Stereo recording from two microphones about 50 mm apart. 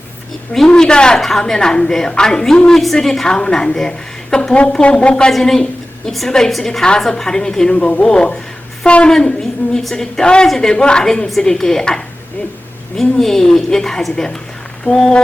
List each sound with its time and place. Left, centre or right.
0.8 s a woman's voice: centre
5.3 s a woman's voice: centre
9.0 s a woman's voice: centre